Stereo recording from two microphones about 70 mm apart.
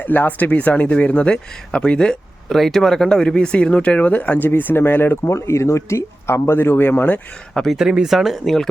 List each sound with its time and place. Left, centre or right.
0.0 s speech: left
7.5 s speech: centre
7.8 s speech: centre